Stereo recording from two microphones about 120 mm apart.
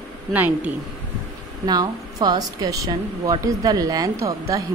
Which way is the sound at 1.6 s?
35° right (ahead or behind).